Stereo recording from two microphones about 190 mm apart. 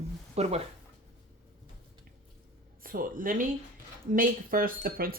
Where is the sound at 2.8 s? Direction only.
45° right (ahead or behind).